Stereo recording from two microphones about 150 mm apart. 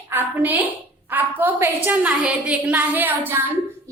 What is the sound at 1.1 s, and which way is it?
A woman's voice, 10° right (ahead or behind).